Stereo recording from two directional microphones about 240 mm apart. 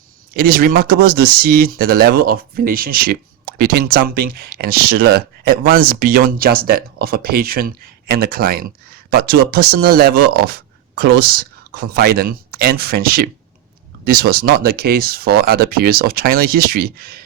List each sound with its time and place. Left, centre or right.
0.3 s speech: right